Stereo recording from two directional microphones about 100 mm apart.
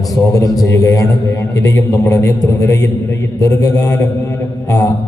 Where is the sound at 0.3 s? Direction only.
35° left (ahead or behind).